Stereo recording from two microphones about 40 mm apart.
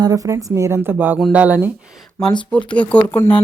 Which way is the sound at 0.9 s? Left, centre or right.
Right.